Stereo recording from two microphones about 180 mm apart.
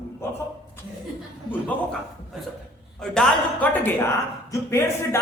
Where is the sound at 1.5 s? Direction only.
10° left (ahead or behind).